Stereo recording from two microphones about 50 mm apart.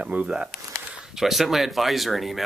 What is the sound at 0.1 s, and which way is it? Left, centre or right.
Speech, right.